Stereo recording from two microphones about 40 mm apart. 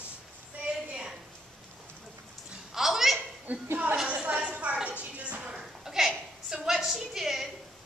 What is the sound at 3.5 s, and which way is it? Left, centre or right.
Speech, right.